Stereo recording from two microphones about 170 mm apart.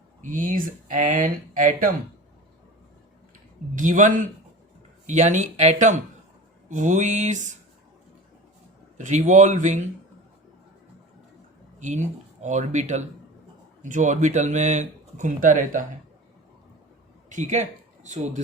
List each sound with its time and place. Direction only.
0.2 s speech: 50° right (ahead or behind)
3.8 s speech: 50° right (ahead or behind)
9.0 s speech: 45° right (ahead or behind)
11.8 s speech: 45° right (ahead or behind)
17.2 s speech: 45° right (ahead or behind)